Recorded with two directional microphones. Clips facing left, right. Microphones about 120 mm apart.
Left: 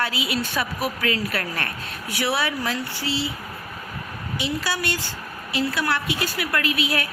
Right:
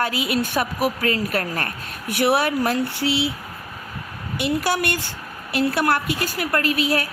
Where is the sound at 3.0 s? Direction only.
65° right (ahead or behind).